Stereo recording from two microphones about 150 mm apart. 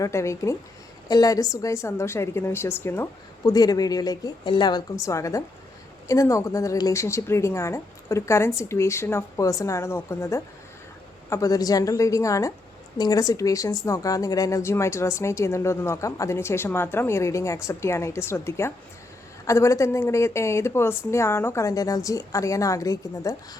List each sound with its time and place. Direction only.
0.0 s speech: 20° left (ahead or behind)